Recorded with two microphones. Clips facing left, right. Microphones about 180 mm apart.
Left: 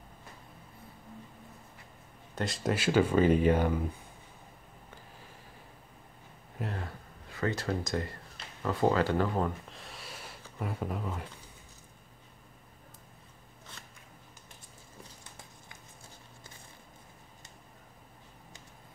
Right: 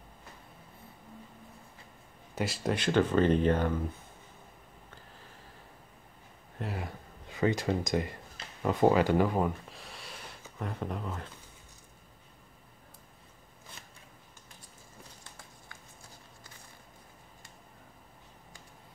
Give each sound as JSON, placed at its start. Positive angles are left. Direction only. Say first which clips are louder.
{"t": 2.3, "sound": "speech", "louder": "even", "side_deg": -5}
{"t": 6.6, "sound": "speech", "louder": "even", "side_deg": -5}
{"t": 7.2, "sound": "speech", "louder": "right 4 dB", "side_deg": -15}
{"t": 9.7, "sound": "a sound", "louder": "even", "side_deg": 0}